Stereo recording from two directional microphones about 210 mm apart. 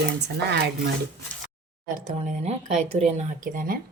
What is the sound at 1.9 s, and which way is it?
Speech, 35° right (ahead or behind).